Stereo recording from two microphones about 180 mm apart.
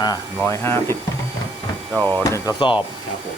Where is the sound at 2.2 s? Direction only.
15° left (ahead or behind).